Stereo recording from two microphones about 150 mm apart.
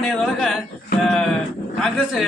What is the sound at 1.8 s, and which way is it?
Speech, centre (ahead or behind).